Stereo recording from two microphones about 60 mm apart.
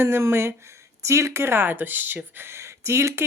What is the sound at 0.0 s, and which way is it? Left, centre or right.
Speech, right.